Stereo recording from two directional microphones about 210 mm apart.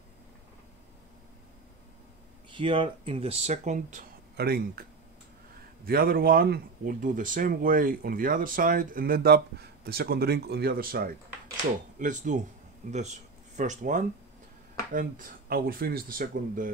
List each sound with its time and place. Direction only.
2.5 s speech: 25° right (ahead or behind); by 4.8 s 45° right (ahead or behind)
5.9 s speech: 45° right (ahead or behind)